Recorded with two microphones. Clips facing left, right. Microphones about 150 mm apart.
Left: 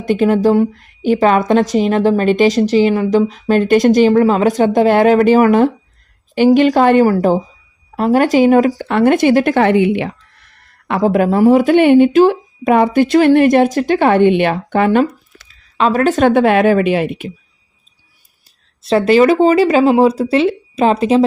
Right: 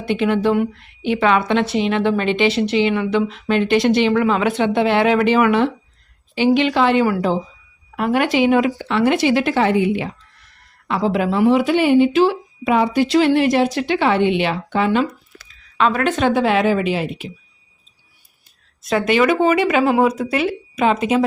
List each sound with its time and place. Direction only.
0.0 s a woman's voice: 45° left (ahead or behind); by 10.2 s 70° left (ahead or behind)
10.8 s speech: 55° left (ahead or behind)
15.8 s speech: 35° left (ahead or behind); by 17.2 s 55° left (ahead or behind)
18.8 s a woman's voice: 30° left (ahead or behind)